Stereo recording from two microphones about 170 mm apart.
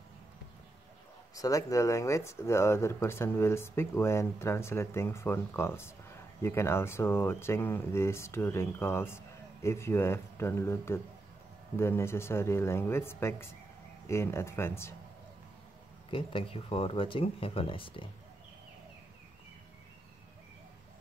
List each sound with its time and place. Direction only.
1.3 s speech: 20° left (ahead or behind)
16.1 s speech: 30° left (ahead or behind)